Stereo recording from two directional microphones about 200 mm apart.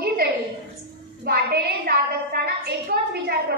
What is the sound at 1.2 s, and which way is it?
A woman's voice, 50° right (ahead or behind).